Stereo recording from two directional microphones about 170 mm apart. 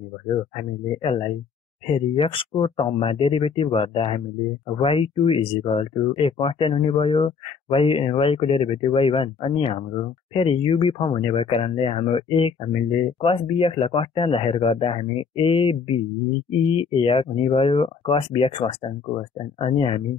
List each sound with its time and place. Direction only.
0.3 s speech: 30° left (ahead or behind)